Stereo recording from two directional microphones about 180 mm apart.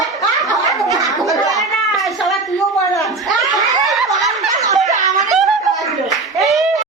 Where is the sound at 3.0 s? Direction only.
Centre (ahead or behind).